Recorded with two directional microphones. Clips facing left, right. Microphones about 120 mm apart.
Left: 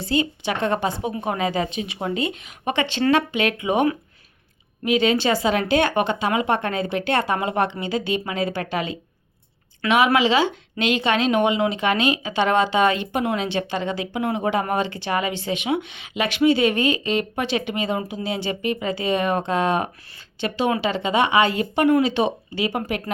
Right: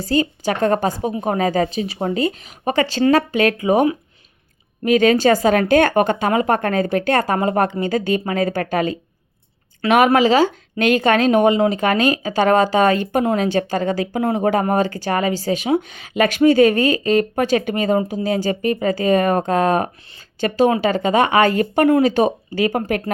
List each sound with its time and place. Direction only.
0.0 s speech: 40° right (ahead or behind)
4.9 s a woman's voice: 45° right (ahead or behind)